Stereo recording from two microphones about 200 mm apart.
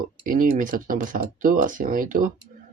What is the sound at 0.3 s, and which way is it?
Speech, 45° right (ahead or behind).